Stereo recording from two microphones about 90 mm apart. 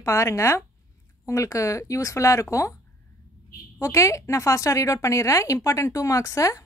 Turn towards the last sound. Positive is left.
turn(degrees=40)  # may be behind; listen again after turning